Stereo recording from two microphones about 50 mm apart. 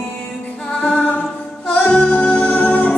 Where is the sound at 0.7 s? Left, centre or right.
Left.